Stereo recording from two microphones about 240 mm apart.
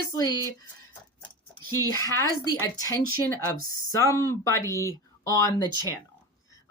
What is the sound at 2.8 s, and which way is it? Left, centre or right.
Speech, centre.